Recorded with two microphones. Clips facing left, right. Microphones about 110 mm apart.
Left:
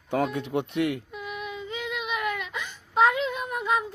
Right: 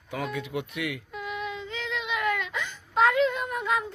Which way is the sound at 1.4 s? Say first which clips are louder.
Left 2 dB; 15° left (ahead or behind).